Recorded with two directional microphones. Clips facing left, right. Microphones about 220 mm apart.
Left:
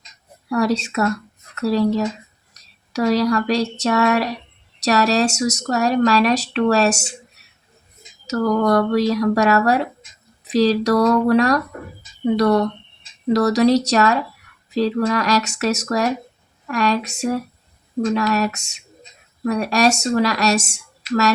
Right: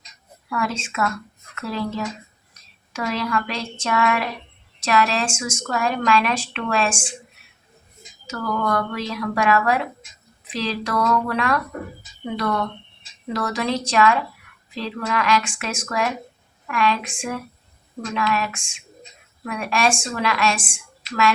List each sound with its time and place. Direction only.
0.5 s speech: 40° left (ahead or behind)
8.3 s speech: 40° left (ahead or behind)